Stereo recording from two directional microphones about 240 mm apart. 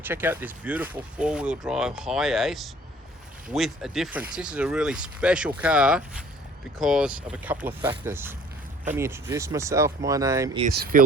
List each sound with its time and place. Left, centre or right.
0.0 s speech: centre
10.9 s speech: right